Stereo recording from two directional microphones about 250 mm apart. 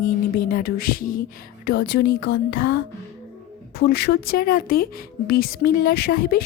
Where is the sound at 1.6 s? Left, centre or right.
Left.